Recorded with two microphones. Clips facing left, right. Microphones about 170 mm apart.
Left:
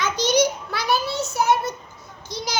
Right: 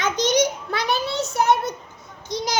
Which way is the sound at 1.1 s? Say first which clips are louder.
Right 1 dB; 5° left (ahead or behind).